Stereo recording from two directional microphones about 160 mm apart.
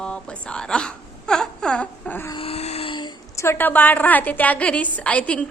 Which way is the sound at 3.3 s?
15° left (ahead or behind).